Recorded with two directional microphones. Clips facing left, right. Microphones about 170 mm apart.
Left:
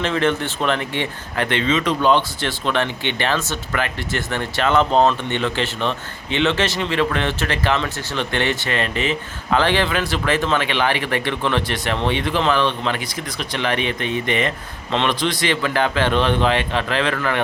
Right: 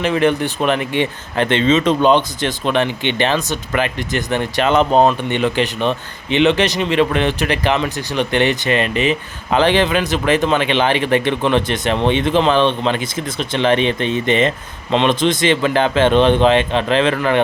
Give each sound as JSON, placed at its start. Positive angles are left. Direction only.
{"t": 0.0, "sound": "speech", "side_deg": -15}